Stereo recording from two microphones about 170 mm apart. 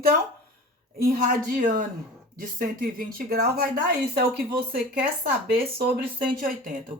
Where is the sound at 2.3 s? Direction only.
55° right (ahead or behind).